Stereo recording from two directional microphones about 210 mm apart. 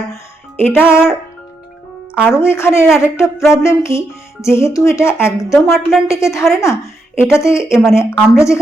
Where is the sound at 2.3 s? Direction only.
10° left (ahead or behind).